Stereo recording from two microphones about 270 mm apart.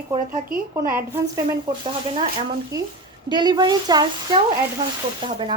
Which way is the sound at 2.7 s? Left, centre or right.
Centre.